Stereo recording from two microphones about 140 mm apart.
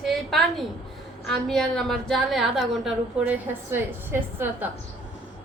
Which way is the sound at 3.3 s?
15° right (ahead or behind).